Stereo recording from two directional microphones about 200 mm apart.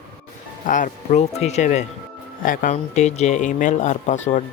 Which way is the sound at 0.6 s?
40° left (ahead or behind).